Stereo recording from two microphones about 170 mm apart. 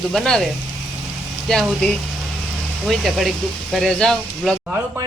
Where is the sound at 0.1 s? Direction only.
Centre (ahead or behind).